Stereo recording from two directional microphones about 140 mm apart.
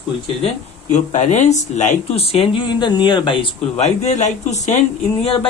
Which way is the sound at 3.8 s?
55° left (ahead or behind).